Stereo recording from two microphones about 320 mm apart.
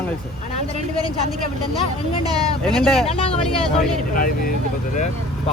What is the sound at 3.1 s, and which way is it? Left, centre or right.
Speech, centre.